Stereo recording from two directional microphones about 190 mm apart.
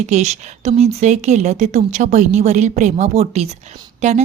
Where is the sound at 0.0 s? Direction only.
35° right (ahead or behind).